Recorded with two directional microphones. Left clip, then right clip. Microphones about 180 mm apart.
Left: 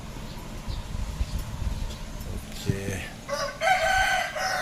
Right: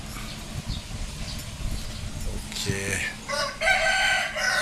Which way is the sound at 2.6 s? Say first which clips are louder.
Right 5 dB; 15° left (ahead or behind).